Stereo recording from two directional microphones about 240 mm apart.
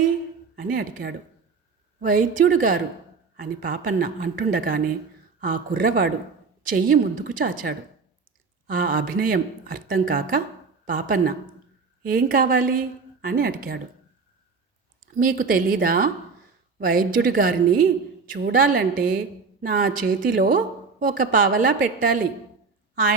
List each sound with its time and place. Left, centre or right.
0.5 s speech: right
15.0 s speech: right